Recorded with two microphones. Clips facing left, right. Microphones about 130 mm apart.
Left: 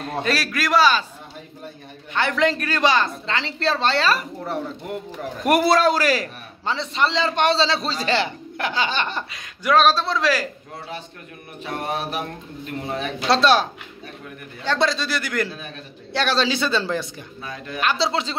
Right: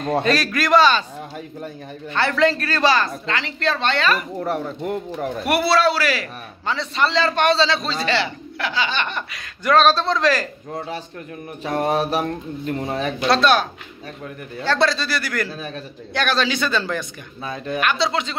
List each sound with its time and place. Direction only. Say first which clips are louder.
0.0 s a man's voice: right 5 dB; 5° left (ahead or behind)
2.1 s speech: right 2 dB; 15° left (ahead or behind); by 4.2 s 35° left (ahead or behind)
5.4 s a man's voice: left 1 dB; 45° left (ahead or behind)
6.6 s a man's voice: right 1 dB; 25° left (ahead or behind)
9.7 s a man's voice: right 1 dB; 10° left (ahead or behind)
11.6 s mantra: right 6 dB; 40° right (ahead or behind)
13.3 s speech: even; 30° left (ahead or behind)
14.6 s a man's voice: right 2 dB; 20° left (ahead or behind)
17.4 s mantra: right 7 dB; 30° right (ahead or behind)
17.7 s a man's voice: right 1 dB; 30° left (ahead or behind)